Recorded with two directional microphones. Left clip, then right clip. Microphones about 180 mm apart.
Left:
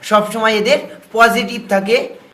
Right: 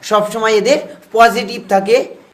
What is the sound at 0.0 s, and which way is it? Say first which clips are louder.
Speech: even; 45° right (ahead or behind).